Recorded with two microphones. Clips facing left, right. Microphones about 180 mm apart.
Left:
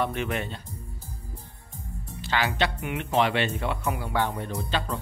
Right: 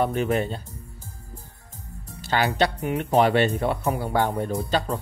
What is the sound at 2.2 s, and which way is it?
Speech, 40° right (ahead or behind).